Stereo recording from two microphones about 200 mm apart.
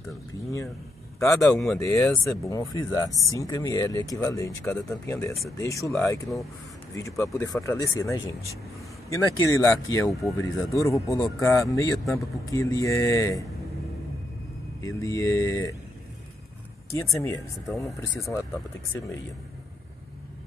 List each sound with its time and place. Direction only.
1.2 s speech: 15° left (ahead or behind)
14.8 s speech: 15° left (ahead or behind)
16.9 s speech: 15° left (ahead or behind)
17.6 s speech: centre (ahead or behind)